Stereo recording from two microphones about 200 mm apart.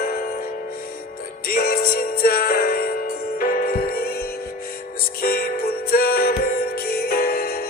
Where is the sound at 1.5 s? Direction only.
45° left (ahead or behind).